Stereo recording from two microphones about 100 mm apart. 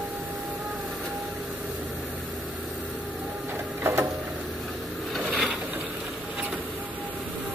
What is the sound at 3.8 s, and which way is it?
Printer, 25° right (ahead or behind).